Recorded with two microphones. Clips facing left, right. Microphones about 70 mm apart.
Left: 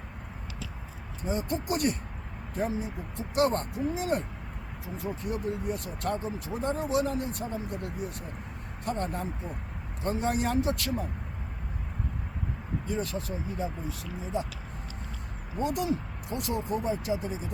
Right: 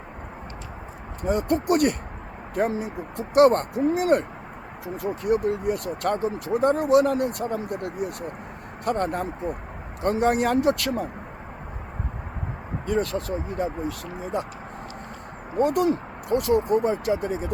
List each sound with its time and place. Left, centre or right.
1.2 s speech: right
12.8 s speech: right
15.5 s speech: right